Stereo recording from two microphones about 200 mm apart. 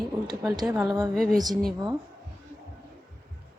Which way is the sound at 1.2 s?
5° left (ahead or behind).